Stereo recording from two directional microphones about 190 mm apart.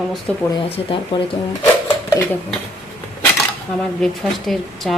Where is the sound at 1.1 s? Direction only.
25° left (ahead or behind).